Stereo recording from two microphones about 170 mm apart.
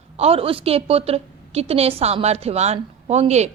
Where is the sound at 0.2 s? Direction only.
35° right (ahead or behind).